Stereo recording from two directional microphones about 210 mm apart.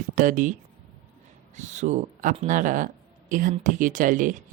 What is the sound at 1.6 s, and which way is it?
Speech, 35° right (ahead or behind).